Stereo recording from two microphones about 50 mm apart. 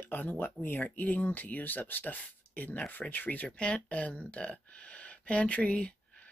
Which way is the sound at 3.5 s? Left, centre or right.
Left.